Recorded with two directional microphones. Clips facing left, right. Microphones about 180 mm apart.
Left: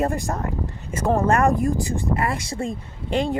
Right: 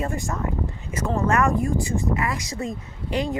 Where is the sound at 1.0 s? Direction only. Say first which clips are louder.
Left 5 dB; 50° left (ahead or behind).